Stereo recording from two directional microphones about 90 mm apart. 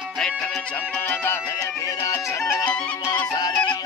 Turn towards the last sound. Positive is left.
turn(degrees=50)  # may be behind; listen again after turning